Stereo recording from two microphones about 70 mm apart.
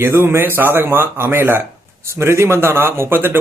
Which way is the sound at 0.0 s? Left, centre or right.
Right.